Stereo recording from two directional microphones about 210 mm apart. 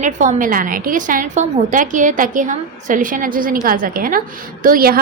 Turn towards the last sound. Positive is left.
turn(degrees=-45)  # may be behind; listen again after turning